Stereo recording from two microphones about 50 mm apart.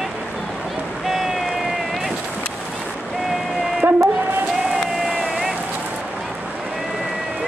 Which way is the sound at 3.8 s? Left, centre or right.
Right.